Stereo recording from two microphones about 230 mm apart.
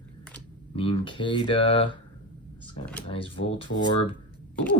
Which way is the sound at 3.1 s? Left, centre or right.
Left.